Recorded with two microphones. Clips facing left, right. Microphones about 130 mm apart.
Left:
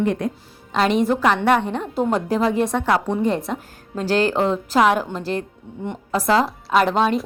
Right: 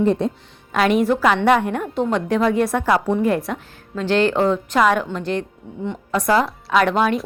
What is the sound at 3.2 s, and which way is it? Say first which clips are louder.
Speech: right 2 dB; 25° left (ahead or behind).